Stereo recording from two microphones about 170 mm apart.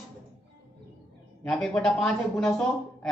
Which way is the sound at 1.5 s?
5° left (ahead or behind).